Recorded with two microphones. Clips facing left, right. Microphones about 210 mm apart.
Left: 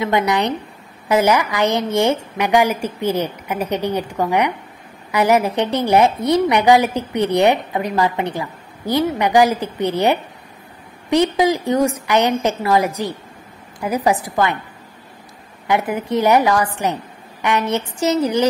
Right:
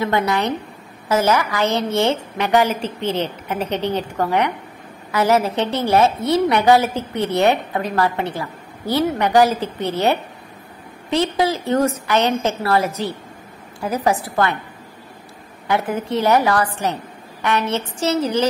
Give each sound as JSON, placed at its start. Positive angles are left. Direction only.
{"t": 0.0, "sound": "a woman's voice", "side_deg": 15}
{"t": 15.6, "sound": "a woman's voice", "side_deg": 15}